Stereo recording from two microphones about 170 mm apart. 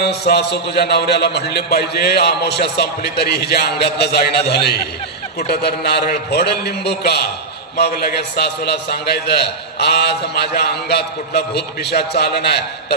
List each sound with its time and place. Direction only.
0.0 s a man's voice: 75° left (ahead or behind)